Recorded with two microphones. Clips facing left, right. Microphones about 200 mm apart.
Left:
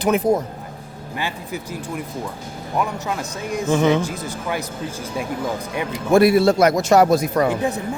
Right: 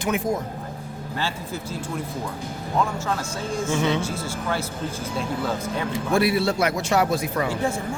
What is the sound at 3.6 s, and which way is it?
Speech, 35° left (ahead or behind).